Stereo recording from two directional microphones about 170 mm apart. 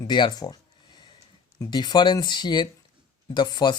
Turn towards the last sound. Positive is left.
turn(degrees=25)  # may be behind; listen again after turning